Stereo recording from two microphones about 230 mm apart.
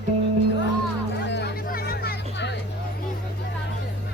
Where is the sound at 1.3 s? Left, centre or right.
Left.